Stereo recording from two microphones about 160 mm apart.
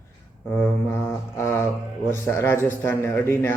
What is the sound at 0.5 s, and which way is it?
A man's voice, 15° left (ahead or behind).